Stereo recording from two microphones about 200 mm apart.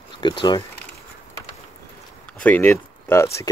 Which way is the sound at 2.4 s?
10° left (ahead or behind).